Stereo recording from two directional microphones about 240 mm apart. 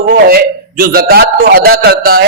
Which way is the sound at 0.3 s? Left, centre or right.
Right.